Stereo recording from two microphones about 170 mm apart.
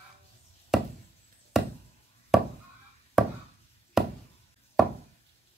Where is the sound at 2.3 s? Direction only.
Centre (ahead or behind).